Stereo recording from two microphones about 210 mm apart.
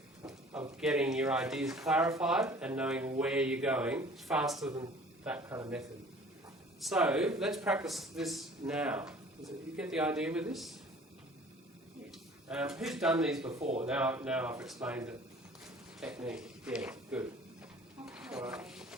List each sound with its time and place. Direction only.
0.8 s a man's voice: 5° right (ahead or behind)
6.8 s speech: 5° right (ahead or behind)
12.5 s speech: 5° right (ahead or behind)
13.5 s speech: 30° right (ahead or behind)
13.8 s speech: 5° right (ahead or behind)
18.0 s a sound: 5° right (ahead or behind)